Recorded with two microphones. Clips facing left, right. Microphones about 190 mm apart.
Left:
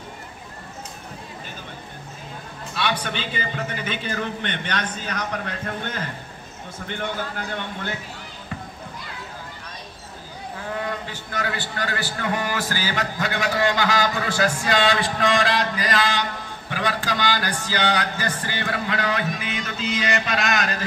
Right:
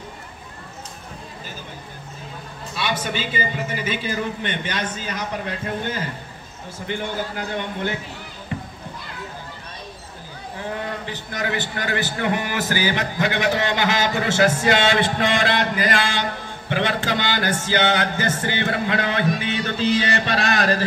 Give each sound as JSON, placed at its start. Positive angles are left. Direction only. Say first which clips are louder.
{"t": 2.7, "sound": "a man's voice", "louder": "right 1 dB", "side_deg": -5}
{"t": 6.9, "sound": "a man's voice", "louder": "right 2 dB", "side_deg": -10}
{"t": 11.3, "sound": "a man's voice", "louder": "right 2 dB", "side_deg": -20}
{"t": 18.4, "sound": "music", "louder": "right 4 dB", "side_deg": -25}